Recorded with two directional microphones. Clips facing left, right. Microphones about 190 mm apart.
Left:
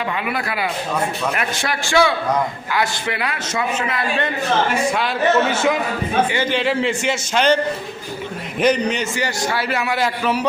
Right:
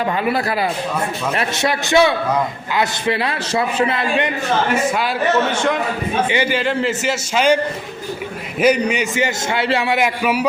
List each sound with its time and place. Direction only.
1.4 s a man's voice: 25° right (ahead or behind)
5.5 s a man's voice: 5° left (ahead or behind)
6.3 s a man's voice: 10° right (ahead or behind)
8.6 s a man's voice: 10° right (ahead or behind)
9.2 s a man's voice: 25° right (ahead or behind)
10.0 s a man's voice: 10° right (ahead or behind)